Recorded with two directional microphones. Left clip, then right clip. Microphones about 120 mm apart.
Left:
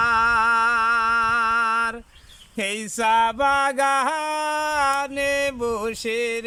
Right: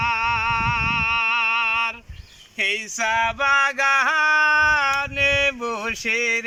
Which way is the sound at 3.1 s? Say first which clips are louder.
Right 1 dB; 90° left.